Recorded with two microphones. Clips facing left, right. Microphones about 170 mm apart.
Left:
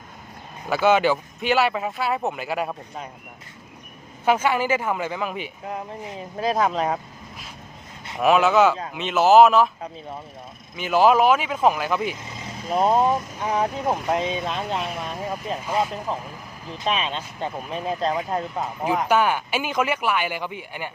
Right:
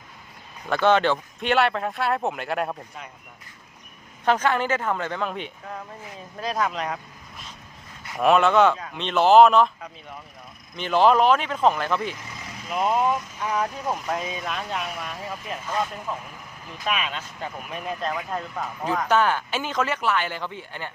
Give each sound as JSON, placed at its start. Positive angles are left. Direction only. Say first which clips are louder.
{"t": 0.7, "sound": "speech", "louder": "left 1 dB", "side_deg": 5}
{"t": 4.3, "sound": "speech", "louder": "left 1 dB", "side_deg": 10}
{"t": 5.6, "sound": "speech", "louder": "left 5 dB", "side_deg": 20}
{"t": 6.6, "sound": "speech", "louder": "left 3 dB", "side_deg": 30}
{"t": 8.2, "sound": "speech", "louder": "left 1 dB", "side_deg": 5}
{"t": 10.8, "sound": "speech", "louder": "left 1 dB", "side_deg": 5}
{"t": 11.9, "sound": "speech", "louder": "left 3 dB", "side_deg": 20}
{"t": 12.6, "sound": "speech", "louder": "left 4 dB", "side_deg": 35}
{"t": 15.6, "sound": "speech", "louder": "left 3 dB", "side_deg": 10}
{"t": 16.1, "sound": "speech", "louder": "left 3 dB", "side_deg": 35}
{"t": 18.9, "sound": "speech", "louder": "left 1 dB", "side_deg": 10}